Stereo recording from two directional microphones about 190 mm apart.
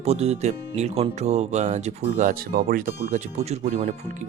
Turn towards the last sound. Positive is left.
turn(degrees=-35)  # may be behind; listen again after turning